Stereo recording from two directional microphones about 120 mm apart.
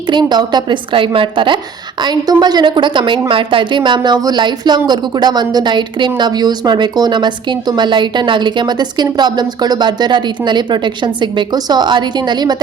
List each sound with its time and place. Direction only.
0.1 s a woman's voice: 40° right (ahead or behind)